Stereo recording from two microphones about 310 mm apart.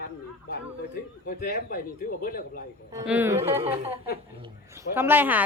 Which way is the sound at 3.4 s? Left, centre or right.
Centre.